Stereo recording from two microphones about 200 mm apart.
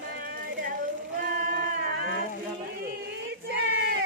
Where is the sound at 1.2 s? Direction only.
40° right (ahead or behind).